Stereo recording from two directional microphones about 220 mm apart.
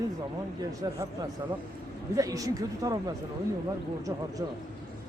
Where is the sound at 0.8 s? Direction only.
15° right (ahead or behind).